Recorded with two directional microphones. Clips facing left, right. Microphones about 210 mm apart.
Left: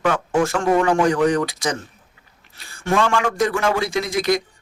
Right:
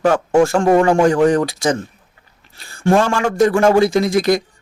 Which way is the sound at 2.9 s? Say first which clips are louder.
Right 5 dB; 40° right (ahead or behind).